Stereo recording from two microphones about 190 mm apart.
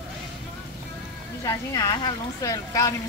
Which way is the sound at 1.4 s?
20° left (ahead or behind).